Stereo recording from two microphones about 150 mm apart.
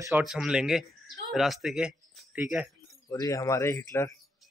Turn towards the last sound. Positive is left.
turn(degrees=20)  # may be behind; listen again after turning